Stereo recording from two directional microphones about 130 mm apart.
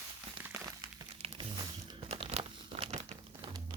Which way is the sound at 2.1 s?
55° right (ahead or behind).